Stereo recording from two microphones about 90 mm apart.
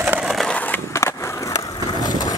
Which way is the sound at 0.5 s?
15° left (ahead or behind).